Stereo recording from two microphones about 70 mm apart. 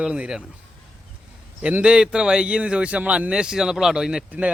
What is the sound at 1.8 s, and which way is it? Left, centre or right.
A man's voice, centre.